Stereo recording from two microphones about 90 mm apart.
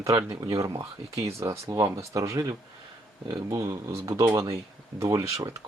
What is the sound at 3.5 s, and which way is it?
Speech, 35° right (ahead or behind).